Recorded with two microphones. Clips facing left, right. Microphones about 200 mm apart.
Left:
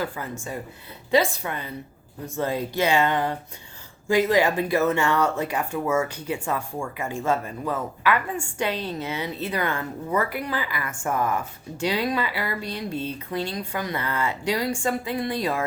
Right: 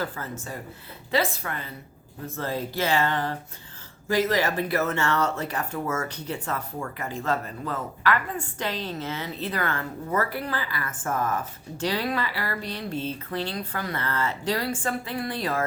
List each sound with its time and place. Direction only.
0.0 s a woman's voice: 15° left (ahead or behind)